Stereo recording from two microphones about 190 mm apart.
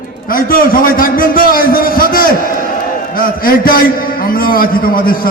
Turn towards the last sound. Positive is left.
turn(degrees=50)  # may be behind; listen again after turning